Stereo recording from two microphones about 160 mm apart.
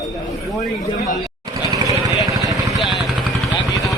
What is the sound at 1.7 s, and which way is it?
Vehicle, 20° right (ahead or behind).